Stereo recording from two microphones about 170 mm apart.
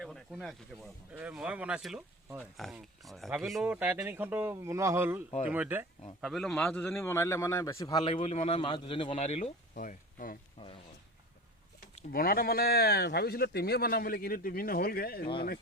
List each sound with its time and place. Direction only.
0.0 s speech: centre (ahead or behind)
6.2 s a man's voice: centre (ahead or behind); by 8.0 s 20° left (ahead or behind)
8.0 s speech: 35° left (ahead or behind); by 10.3 s 55° left (ahead or behind)
10.6 s speech: 30° left (ahead or behind)
12.1 s speech: 60° left (ahead or behind)